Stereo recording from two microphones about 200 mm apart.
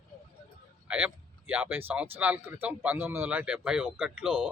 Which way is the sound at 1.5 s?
10° right (ahead or behind).